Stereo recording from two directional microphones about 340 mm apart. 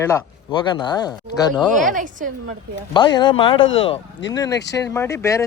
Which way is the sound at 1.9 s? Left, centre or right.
Right.